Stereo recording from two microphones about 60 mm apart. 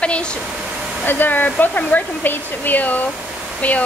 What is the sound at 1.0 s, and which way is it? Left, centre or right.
Speech, left.